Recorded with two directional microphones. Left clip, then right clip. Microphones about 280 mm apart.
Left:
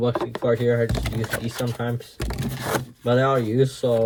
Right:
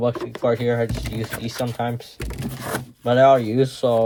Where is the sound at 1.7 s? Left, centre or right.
Centre.